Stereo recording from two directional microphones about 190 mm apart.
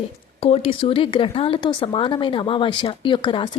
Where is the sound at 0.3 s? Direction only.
30° left (ahead or behind).